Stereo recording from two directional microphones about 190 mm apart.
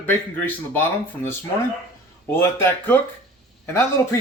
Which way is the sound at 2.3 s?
10° left (ahead or behind).